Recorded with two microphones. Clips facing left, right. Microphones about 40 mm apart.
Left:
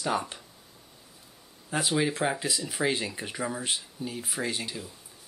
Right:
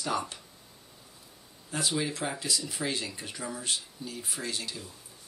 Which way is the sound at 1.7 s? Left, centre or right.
Left.